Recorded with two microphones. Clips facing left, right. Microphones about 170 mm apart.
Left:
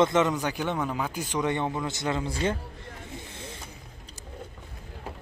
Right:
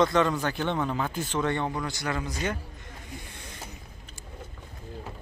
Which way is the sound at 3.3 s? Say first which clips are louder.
Left 4 dB; 25° left (ahead or behind).